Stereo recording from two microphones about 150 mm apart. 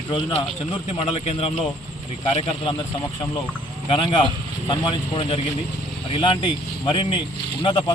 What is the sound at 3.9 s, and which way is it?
Speech, 35° left (ahead or behind).